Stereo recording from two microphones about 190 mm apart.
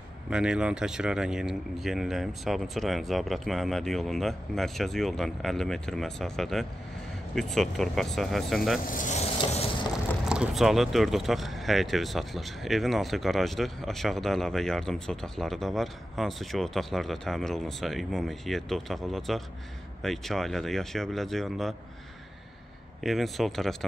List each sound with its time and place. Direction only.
0.3 s speech: 5° right (ahead or behind)
8.9 s speech: 40° left (ahead or behind)
10.2 s speech: 5° right (ahead or behind)
23.0 s speech: centre (ahead or behind)